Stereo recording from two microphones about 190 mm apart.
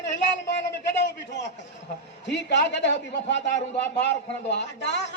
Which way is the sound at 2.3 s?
65° left (ahead or behind).